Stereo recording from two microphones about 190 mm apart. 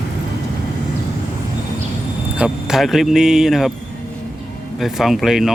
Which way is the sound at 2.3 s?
5° right (ahead or behind).